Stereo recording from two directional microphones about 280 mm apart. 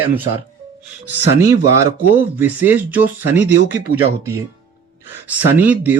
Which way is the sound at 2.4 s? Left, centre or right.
Centre.